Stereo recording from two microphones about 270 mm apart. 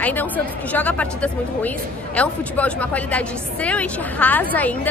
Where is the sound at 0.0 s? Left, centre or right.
Centre.